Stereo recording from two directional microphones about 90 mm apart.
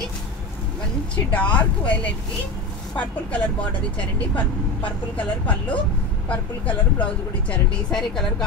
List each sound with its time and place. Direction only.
1.1 s speech: 15° left (ahead or behind)
5.1 s speech: 15° left (ahead or behind)